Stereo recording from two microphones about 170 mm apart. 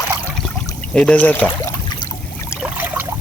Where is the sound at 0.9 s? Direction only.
5° left (ahead or behind).